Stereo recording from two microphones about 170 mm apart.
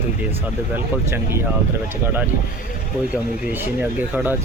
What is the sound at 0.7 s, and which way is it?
Speech, 15° right (ahead or behind).